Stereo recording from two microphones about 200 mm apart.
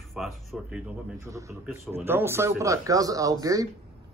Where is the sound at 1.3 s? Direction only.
15° right (ahead or behind).